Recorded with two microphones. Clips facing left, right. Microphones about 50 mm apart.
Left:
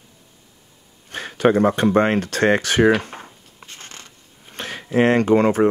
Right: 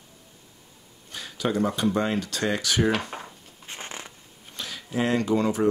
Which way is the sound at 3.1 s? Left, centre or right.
Centre.